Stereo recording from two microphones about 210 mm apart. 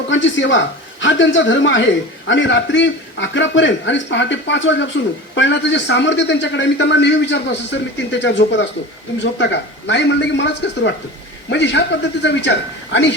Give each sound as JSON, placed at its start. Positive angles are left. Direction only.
{"t": 0.1, "sound": "a man's voice", "side_deg": 60}